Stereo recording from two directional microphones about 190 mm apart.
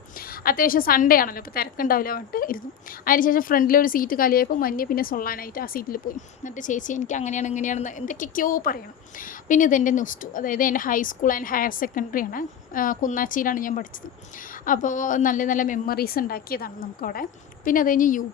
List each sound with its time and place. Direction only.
0.4 s a woman's voice: 50° left (ahead or behind)